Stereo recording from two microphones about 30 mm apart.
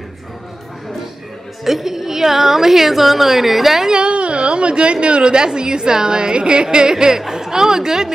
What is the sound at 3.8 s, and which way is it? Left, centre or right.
A woman's voice, right.